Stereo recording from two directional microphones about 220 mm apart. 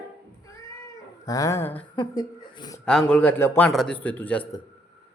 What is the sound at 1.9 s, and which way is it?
Speech, 20° left (ahead or behind).